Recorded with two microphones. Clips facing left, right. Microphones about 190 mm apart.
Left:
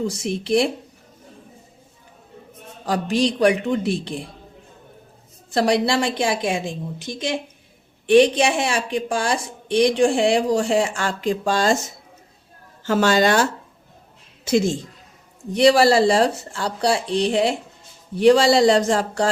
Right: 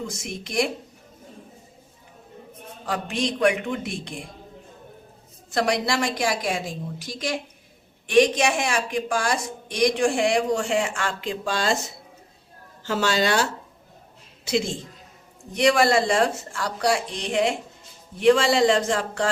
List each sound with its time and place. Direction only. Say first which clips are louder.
0.0 s a woman's voice: left 8 dB; 35° left (ahead or behind)
2.8 s a woman's voice: left 6 dB; 35° left (ahead or behind)
5.5 s a woman's voice: left 5 dB; 30° left (ahead or behind)
12.8 s speech: left 6 dB; 50° left (ahead or behind)
15.5 s a woman's voice: left 5 dB; 35° left (ahead or behind)